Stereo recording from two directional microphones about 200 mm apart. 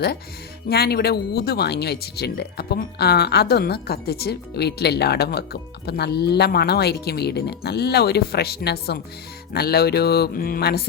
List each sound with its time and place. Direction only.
0.7 s speech: 50° left (ahead or behind)